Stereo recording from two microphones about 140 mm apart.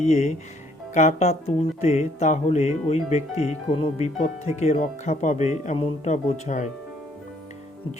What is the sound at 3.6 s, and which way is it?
Speech, 40° left (ahead or behind).